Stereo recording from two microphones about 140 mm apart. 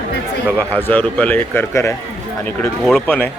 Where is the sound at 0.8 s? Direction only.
15° left (ahead or behind).